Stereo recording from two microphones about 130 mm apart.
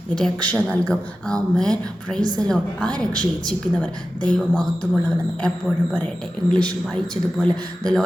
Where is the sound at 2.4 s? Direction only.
10° left (ahead or behind).